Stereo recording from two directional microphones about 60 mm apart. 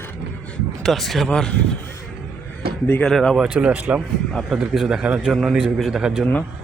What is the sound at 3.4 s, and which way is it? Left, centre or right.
A man's voice, centre.